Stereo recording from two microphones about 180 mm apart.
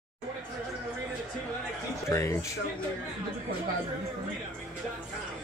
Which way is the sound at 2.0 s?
15° left (ahead or behind).